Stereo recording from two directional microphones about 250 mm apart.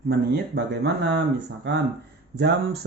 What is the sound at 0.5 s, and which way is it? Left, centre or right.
Speech, right.